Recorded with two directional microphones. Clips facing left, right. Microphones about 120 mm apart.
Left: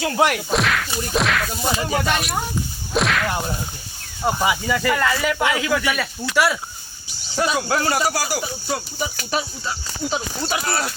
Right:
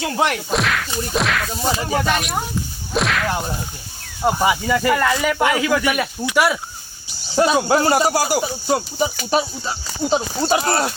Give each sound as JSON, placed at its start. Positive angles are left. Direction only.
{"t": 0.2, "sound": "whip", "side_deg": 5}
{"t": 4.2, "sound": "speech", "side_deg": -5}
{"t": 7.3, "sound": "speech", "side_deg": -30}